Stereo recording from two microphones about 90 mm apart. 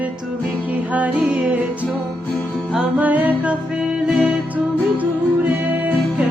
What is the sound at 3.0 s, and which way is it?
Music, 20° right (ahead or behind).